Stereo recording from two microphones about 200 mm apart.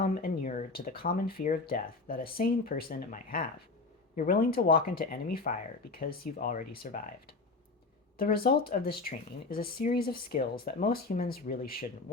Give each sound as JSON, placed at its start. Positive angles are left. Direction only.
{"t": 0.0, "sound": "speech", "side_deg": 45}